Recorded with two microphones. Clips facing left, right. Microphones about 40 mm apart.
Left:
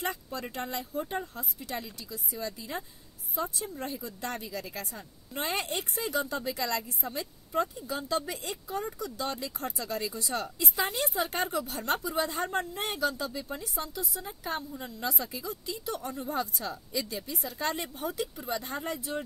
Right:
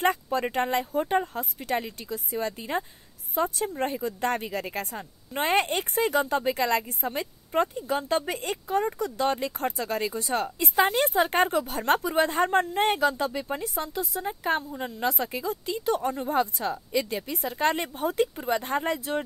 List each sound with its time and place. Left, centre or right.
0.0 s speech: right